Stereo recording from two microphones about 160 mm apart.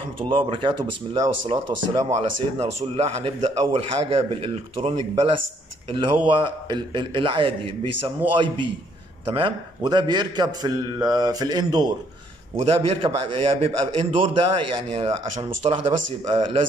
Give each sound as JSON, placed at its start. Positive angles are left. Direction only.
{"t": 0.2, "sound": "a man's voice", "side_deg": -30}
{"t": 2.0, "sound": "a man's voice", "side_deg": -40}
{"t": 9.2, "sound": "a man's voice", "side_deg": -35}
{"t": 12.5, "sound": "a man's voice", "side_deg": -35}